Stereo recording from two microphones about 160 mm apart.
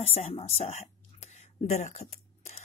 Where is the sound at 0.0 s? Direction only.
40° left (ahead or behind).